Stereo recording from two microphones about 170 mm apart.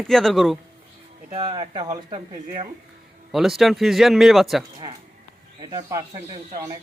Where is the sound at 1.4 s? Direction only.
25° right (ahead or behind).